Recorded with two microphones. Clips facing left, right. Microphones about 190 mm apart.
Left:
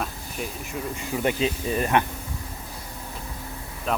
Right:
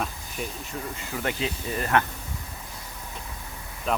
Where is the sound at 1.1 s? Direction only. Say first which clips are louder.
Left 5 dB; 20° left (ahead or behind).